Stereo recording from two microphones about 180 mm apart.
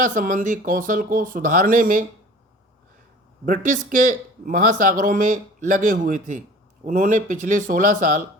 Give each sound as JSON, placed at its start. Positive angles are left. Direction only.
{"t": 0.0, "sound": "speech", "side_deg": -45}
{"t": 3.4, "sound": "speech", "side_deg": -50}